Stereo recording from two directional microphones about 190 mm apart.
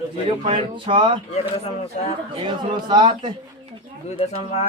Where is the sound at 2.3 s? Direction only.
25° right (ahead or behind).